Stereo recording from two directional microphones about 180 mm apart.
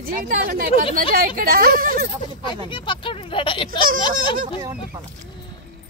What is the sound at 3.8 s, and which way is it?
Speech, 50° right (ahead or behind).